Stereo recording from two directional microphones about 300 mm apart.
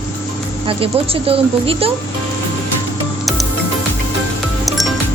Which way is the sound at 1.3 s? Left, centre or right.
Centre.